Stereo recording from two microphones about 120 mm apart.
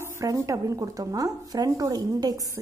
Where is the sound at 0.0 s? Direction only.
20° right (ahead or behind).